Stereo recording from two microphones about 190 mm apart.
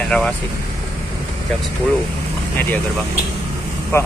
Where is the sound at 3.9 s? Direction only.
10° left (ahead or behind).